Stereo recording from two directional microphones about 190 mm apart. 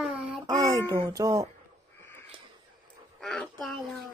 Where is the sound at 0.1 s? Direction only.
Centre (ahead or behind).